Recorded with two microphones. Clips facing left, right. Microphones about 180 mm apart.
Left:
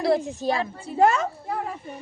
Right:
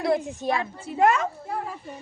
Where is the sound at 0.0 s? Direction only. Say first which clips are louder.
Left 2 dB; 30° left (ahead or behind).